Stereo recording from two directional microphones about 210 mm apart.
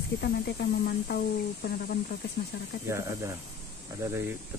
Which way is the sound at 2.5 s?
50° left (ahead or behind).